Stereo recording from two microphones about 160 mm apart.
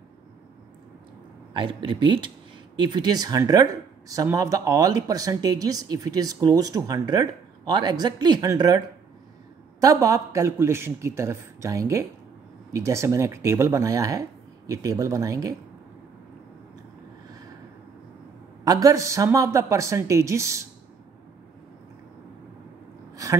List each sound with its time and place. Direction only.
1.5 s speech: 30° right (ahead or behind)
18.6 s speech: 20° right (ahead or behind)